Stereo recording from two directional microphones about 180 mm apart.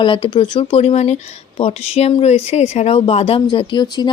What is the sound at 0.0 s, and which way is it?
Speech, 30° left (ahead or behind).